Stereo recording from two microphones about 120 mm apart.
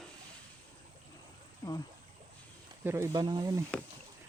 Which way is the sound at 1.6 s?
20° left (ahead or behind).